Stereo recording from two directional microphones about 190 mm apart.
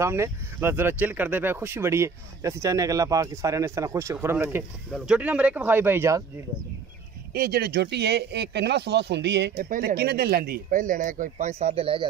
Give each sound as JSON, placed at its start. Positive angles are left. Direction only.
{"t": 0.0, "sound": "speech", "side_deg": -15}
{"t": 7.3, "sound": "speech", "side_deg": -55}
{"t": 9.7, "sound": "speech", "side_deg": -55}